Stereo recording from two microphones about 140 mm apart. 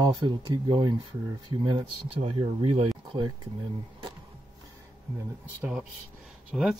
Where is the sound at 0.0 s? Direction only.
35° right (ahead or behind).